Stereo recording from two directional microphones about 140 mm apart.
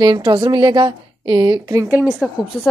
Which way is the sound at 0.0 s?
30° right (ahead or behind).